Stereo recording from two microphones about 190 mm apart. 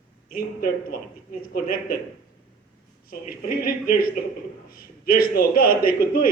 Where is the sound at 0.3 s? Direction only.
50° left (ahead or behind).